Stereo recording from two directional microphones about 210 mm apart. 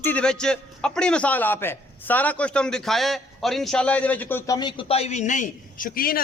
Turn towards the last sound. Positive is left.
turn(degrees=45)  # may be behind; listen again after turning